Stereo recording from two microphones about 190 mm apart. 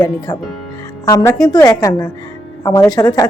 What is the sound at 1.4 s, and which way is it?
A woman's voice, 20° left (ahead or behind).